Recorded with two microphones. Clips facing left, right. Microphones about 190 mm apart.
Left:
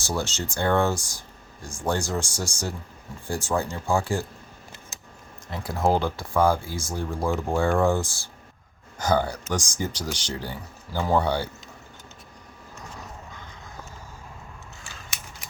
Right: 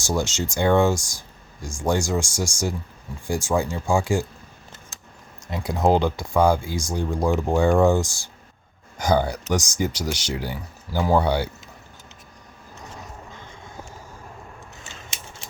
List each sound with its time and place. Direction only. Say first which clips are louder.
0.0 s speech: right 4 dB; 15° right (ahead or behind)
5.5 s speech: right 3 dB; 20° right (ahead or behind)
14.8 s a sound: right 1 dB; 25° right (ahead or behind)